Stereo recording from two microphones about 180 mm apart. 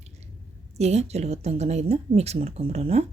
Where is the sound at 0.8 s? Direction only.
35° right (ahead or behind).